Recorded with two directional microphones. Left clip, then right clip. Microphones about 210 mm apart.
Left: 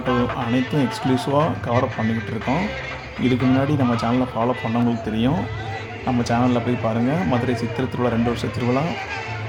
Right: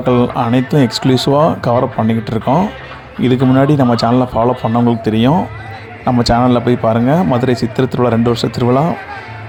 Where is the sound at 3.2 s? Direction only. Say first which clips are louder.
Right 8 dB; 35° right (ahead or behind).